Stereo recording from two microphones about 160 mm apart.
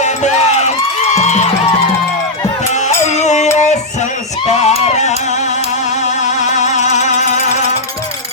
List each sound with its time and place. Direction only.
1.0 s music: 45° left (ahead or behind)
3.2 s music: 45° left (ahead or behind)
4.6 s a sound: 45° left (ahead or behind)
6.5 s music: 45° left (ahead or behind)